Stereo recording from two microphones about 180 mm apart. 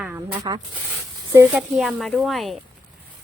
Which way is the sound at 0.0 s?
10° right (ahead or behind).